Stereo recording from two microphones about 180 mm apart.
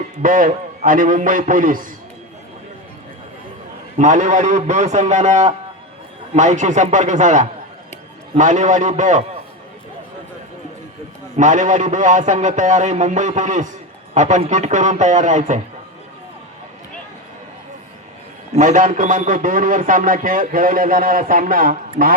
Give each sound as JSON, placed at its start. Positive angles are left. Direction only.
{"t": 0.2, "sound": "a man's voice", "side_deg": -50}
{"t": 3.9, "sound": "a man's voice", "side_deg": -45}
{"t": 11.3, "sound": "a man's voice", "side_deg": -45}
{"t": 18.5, "sound": "a man's voice", "side_deg": -45}